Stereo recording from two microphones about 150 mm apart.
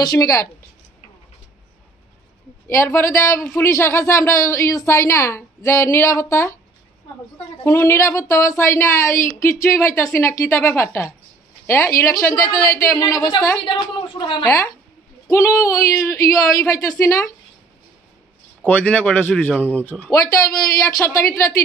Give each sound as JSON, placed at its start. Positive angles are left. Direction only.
{"t": 0.0, "sound": "a woman's voice", "side_deg": 25}
{"t": 2.7, "sound": "a woman's voice", "side_deg": 15}
{"t": 7.6, "sound": "a woman's voice", "side_deg": 15}
{"t": 13.7, "sound": "a woman's voice", "side_deg": 35}
{"t": 15.2, "sound": "a woman's voice", "side_deg": 20}
{"t": 18.6, "sound": "a woman's voice", "side_deg": 10}